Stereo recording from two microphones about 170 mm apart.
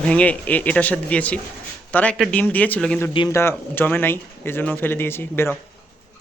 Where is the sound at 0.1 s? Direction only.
10° left (ahead or behind).